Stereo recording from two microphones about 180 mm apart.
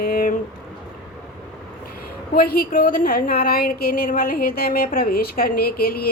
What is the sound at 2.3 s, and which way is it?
A woman's voice, 55° left (ahead or behind).